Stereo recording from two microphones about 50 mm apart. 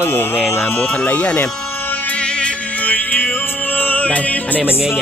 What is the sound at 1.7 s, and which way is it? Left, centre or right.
Music, left.